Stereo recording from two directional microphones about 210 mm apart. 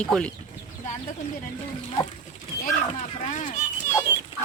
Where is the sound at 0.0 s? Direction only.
5° left (ahead or behind).